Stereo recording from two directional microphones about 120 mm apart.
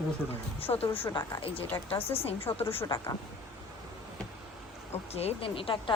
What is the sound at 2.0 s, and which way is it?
Speech, 55° left (ahead or behind).